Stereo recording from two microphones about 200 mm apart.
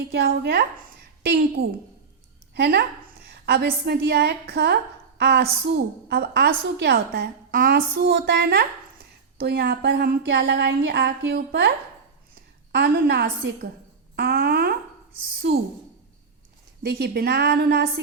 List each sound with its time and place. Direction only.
0.0 s a woman's voice: 50° right (ahead or behind)
12.7 s a woman's voice: 55° right (ahead or behind)
16.8 s a woman's voice: 55° right (ahead or behind)